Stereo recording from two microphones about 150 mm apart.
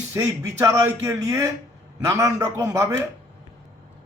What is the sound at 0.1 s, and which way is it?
A man's voice, 20° right (ahead or behind).